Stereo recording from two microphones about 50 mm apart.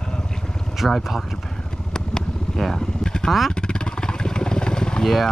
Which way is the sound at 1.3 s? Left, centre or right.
Centre.